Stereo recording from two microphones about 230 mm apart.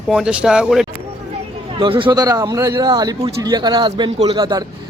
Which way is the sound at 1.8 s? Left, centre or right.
Right.